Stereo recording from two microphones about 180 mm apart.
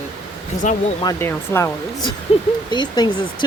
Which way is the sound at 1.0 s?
15° left (ahead or behind).